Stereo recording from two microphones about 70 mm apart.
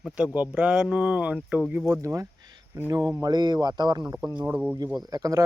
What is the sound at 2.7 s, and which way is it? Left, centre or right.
Speech, right.